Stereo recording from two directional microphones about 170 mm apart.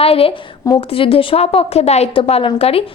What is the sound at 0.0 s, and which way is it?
A woman's voice, 35° left (ahead or behind).